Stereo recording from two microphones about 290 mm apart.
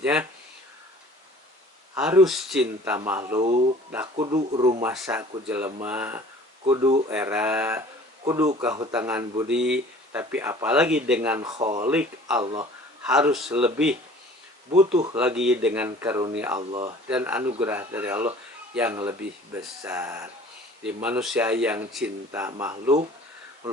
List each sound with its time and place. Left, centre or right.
0.0 s speech: centre
2.0 s speech: centre
12.4 s speech: centre
13.0 s speech: centre
15.1 s speech: centre